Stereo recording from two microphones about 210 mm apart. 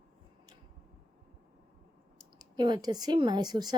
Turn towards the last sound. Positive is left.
turn(degrees=-20)  # may be behind; listen again after turning